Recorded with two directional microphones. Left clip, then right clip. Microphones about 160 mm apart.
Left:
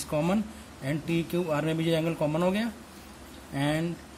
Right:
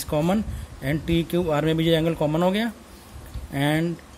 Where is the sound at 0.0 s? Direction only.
45° right (ahead or behind).